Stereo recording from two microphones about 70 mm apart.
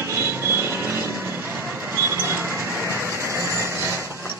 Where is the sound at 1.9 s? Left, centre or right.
Right.